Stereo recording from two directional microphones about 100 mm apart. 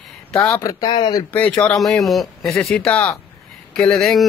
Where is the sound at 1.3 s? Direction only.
15° left (ahead or behind).